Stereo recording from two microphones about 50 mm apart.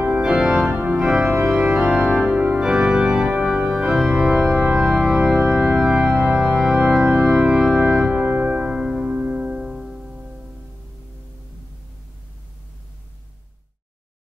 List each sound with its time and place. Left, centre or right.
0.2 s organ: centre
0.7 s organ: right
0.9 s organ: centre
3.9 s organ: centre
6.6 s organ: centre
8.3 s music: right